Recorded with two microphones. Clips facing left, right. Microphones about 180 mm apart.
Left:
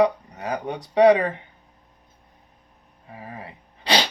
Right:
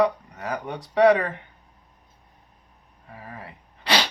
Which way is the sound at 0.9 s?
20° left (ahead or behind).